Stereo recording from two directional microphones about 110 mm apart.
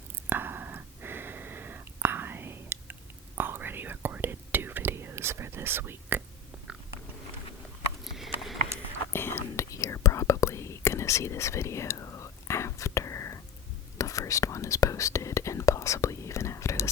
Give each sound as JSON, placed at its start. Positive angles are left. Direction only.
{"t": 0.3, "sound": "whispering", "side_deg": -20}
{"t": 8.0, "sound": "sniff", "side_deg": 0}
{"t": 9.1, "sound": "whispering", "side_deg": 20}